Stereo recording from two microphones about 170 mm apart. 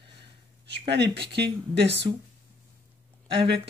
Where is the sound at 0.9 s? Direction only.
90° right.